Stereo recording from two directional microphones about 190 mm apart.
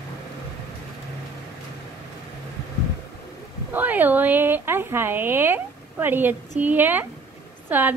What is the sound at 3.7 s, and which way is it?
A woman's voice, 10° right (ahead or behind).